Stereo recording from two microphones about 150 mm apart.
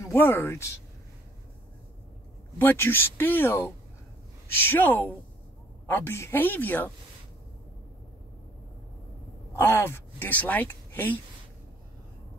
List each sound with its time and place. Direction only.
0.0 s speech: 15° left (ahead or behind)
2.6 s speech: 15° left (ahead or behind)
9.6 s speech: 15° left (ahead or behind)